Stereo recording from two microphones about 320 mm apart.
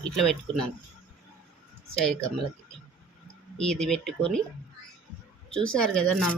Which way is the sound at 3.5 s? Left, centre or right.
Centre.